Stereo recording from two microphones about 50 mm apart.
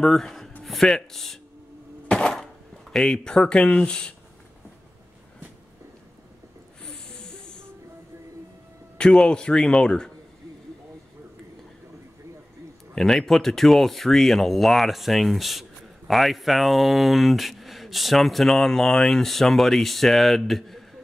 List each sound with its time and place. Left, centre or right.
0.0 s speech: centre
8.9 s a man's voice: centre
12.9 s speech: centre